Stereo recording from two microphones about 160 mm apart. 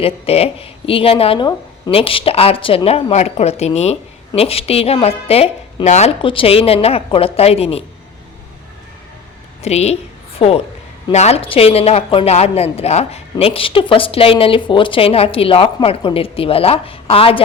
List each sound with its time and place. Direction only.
0.0 s speech: 40° left (ahead or behind)
9.6 s a woman's voice: 40° left (ahead or behind)